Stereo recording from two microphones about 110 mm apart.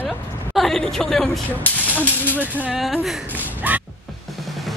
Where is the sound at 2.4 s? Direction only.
15° right (ahead or behind).